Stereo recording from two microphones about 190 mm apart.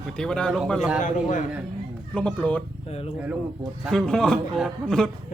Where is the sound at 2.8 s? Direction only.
30° left (ahead or behind).